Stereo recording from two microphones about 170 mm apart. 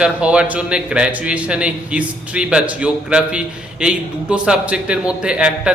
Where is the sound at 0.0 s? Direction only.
5° right (ahead or behind).